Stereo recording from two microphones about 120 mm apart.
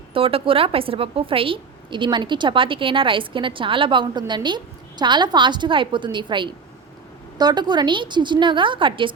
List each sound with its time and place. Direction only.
0.1 s a woman's voice: 50° right (ahead or behind)